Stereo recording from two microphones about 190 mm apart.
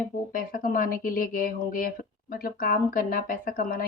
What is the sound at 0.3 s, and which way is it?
Speech, 50° left (ahead or behind).